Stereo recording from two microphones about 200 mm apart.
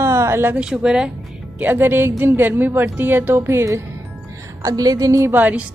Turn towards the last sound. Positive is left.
turn(degrees=-10)  # may be behind; listen again after turning